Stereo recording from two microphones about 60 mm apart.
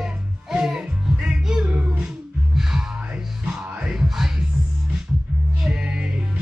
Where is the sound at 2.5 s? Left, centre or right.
Centre.